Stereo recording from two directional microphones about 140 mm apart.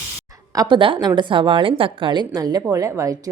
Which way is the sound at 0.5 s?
30° right (ahead or behind).